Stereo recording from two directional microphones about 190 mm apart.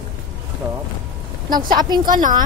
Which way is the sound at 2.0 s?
45° right (ahead or behind).